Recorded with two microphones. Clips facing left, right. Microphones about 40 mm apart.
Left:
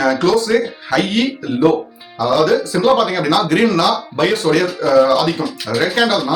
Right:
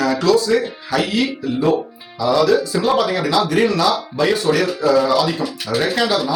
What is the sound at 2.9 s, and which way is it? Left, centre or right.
Speech, left.